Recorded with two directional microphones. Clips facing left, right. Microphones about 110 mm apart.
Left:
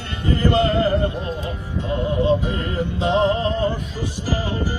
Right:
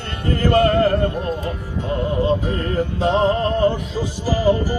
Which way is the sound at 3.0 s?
40° right (ahead or behind).